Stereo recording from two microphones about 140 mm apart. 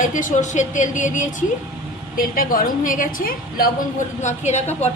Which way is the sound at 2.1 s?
90° left.